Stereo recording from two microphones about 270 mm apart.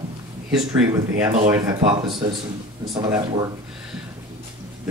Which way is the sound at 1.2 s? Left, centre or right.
Centre.